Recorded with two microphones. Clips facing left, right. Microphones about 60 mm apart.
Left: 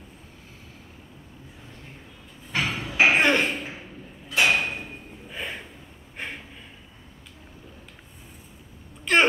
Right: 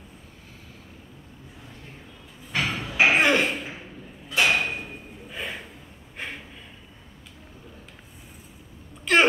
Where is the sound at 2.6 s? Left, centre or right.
Centre.